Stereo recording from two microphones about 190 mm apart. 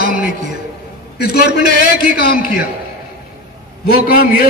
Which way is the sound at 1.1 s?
55° left (ahead or behind).